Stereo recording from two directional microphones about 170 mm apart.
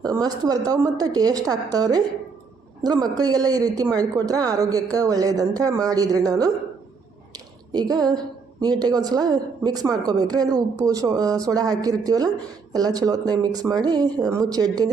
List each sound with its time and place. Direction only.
0.0 s a woman's voice: 25° right (ahead or behind)
7.3 s a sound: 25° right (ahead or behind)
8.6 s a woman's voice: 25° right (ahead or behind)